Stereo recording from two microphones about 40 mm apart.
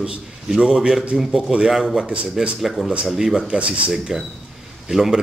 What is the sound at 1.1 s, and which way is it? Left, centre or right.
Speech, right.